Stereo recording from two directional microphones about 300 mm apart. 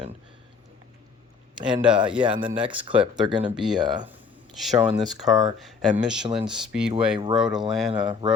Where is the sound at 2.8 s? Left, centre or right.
Centre.